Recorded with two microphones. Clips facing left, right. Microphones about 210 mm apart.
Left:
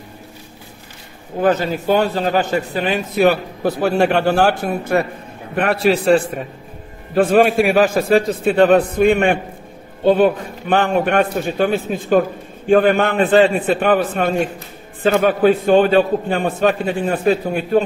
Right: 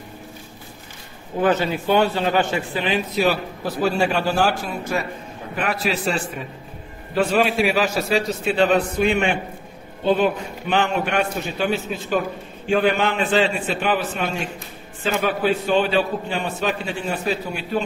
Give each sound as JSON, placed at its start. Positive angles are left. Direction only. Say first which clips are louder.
{"t": 1.4, "sound": "a man's voice", "louder": "left 3 dB", "side_deg": 40}